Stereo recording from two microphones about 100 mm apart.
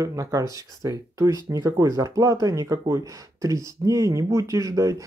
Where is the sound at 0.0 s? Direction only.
35° right (ahead or behind).